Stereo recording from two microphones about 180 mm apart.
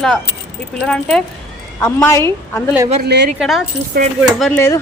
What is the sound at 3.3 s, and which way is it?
Speech, centre (ahead or behind).